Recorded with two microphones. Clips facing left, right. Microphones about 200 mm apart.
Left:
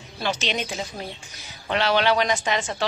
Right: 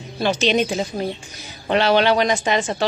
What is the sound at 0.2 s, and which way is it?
A woman's voice, 40° right (ahead or behind).